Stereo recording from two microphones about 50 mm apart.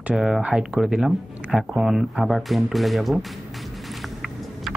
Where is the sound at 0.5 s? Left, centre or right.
Centre.